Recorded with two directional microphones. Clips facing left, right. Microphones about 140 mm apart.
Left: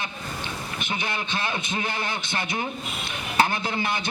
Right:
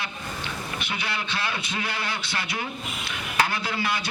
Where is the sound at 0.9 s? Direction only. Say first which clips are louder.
Left 3 dB; 20° left (ahead or behind).